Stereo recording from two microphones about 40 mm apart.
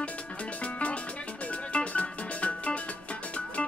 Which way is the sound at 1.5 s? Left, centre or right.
Left.